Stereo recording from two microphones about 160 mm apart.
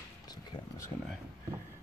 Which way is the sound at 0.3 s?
20° left (ahead or behind).